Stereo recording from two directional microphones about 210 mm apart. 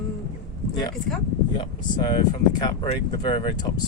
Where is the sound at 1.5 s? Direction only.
25° left (ahead or behind).